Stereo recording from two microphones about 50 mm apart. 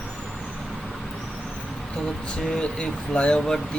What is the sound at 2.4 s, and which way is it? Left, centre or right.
Speech, centre.